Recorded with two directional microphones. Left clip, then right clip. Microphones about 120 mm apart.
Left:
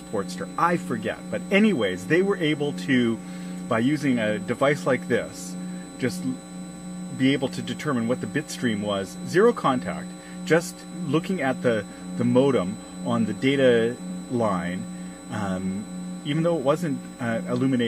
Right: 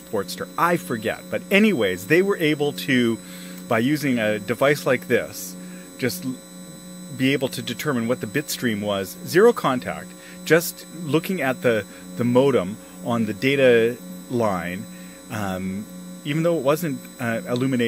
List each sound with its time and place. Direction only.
0.1 s speech: 70° right (ahead or behind)
7.2 s speech: 70° right (ahead or behind)